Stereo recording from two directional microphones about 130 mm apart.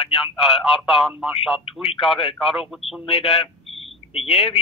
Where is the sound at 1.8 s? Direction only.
45° left (ahead or behind).